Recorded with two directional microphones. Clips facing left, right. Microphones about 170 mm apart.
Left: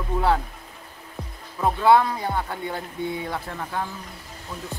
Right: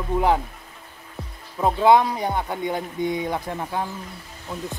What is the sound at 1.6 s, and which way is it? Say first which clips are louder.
Speech: right 1 dB; 20° right (ahead or behind).